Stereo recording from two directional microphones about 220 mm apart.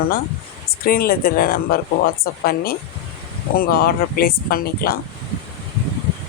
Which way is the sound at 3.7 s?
45° left (ahead or behind).